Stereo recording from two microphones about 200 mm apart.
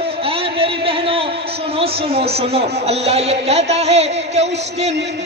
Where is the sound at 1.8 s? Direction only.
30° right (ahead or behind).